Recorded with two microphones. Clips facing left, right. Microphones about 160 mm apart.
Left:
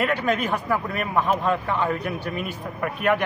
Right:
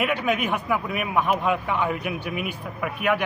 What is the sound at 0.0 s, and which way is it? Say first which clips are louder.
A man's voice: left 1 dB; 10° right (ahead or behind).